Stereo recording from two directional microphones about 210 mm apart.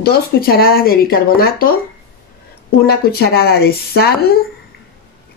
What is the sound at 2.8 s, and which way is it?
A woman's voice, 50° left (ahead or behind).